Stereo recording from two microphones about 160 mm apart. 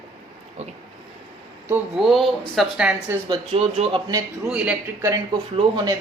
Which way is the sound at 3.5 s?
40° right (ahead or behind).